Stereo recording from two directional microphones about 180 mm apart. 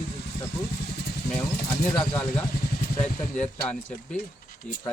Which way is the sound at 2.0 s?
5° left (ahead or behind).